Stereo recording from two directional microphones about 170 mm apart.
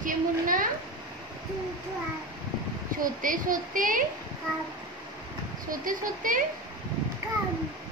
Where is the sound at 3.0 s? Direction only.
55° right (ahead or behind).